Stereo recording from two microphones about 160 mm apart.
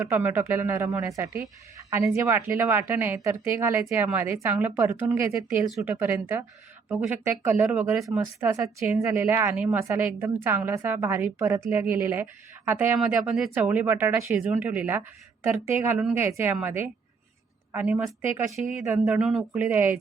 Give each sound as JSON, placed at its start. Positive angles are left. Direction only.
{"t": 0.0, "sound": "a woman's voice", "side_deg": -15}
{"t": 8.4, "sound": "a woman's voice", "side_deg": -20}
{"t": 13.0, "sound": "a woman's voice", "side_deg": 0}
{"t": 19.0, "sound": "a woman's voice", "side_deg": -5}